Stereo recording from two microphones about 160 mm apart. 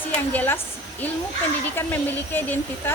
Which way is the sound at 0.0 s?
10° left (ahead or behind).